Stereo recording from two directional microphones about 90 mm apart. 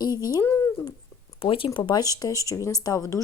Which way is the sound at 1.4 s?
80° left.